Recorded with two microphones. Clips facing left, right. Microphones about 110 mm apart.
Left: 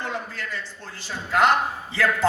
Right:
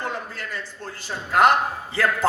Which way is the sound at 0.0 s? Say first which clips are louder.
Right 1 dB; 45° right (ahead or behind).